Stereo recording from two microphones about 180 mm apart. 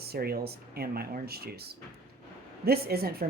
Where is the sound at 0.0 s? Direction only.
60° right (ahead or behind).